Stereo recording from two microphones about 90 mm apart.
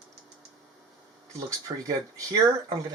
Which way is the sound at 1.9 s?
40° right (ahead or behind).